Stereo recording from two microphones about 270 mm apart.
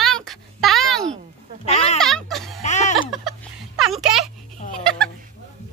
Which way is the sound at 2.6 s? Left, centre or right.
Left.